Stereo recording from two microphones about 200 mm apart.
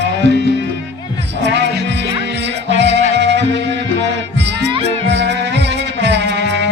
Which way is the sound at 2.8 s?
60° right (ahead or behind).